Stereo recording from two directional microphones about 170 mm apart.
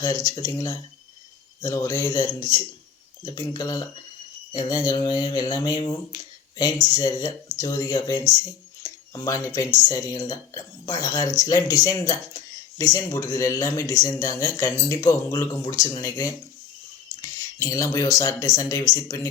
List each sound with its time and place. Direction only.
0.0 s speech: 20° left (ahead or behind)